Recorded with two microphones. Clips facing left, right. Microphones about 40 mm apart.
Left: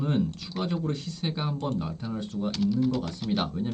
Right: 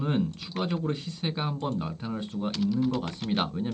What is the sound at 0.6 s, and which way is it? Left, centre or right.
Speech, right.